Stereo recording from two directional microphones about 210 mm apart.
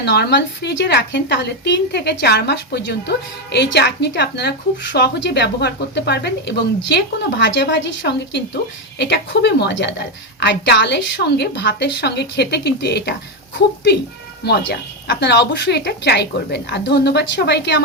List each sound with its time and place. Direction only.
0.0 s a woman's voice: 55° left (ahead or behind)
14.4 s a woman's voice: 50° left (ahead or behind)